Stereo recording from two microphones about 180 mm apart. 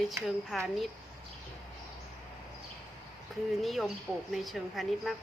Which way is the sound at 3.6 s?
Centre (ahead or behind).